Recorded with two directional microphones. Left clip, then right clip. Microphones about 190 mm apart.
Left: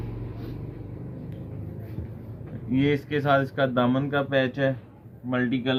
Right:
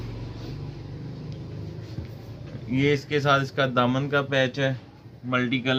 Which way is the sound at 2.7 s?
20° right (ahead or behind).